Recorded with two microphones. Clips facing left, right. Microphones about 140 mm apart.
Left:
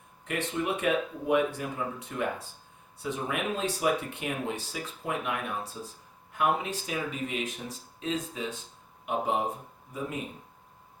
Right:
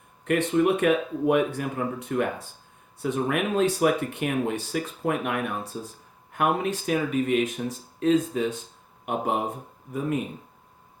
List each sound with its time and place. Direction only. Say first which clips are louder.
0.3 s speech: right 9 dB; 55° right (ahead or behind)